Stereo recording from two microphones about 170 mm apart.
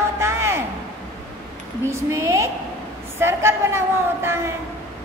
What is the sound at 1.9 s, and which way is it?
A woman's voice, 15° right (ahead or behind).